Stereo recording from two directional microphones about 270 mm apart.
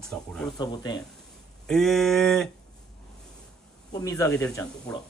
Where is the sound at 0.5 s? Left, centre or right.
Centre.